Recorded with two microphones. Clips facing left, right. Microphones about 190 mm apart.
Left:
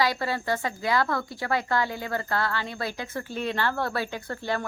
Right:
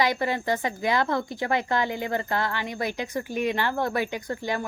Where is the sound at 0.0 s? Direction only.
20° right (ahead or behind).